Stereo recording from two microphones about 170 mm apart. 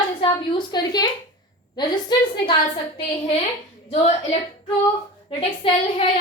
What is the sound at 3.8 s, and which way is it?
A woman's voice, 35° left (ahead or behind).